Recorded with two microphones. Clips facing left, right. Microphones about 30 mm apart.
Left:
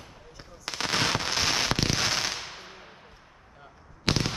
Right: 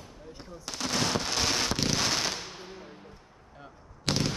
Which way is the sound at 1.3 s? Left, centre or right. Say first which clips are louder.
Left 2 dB; left.